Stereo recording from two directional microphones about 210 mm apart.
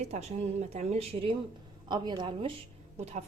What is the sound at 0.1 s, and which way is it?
A woman's voice, 30° right (ahead or behind).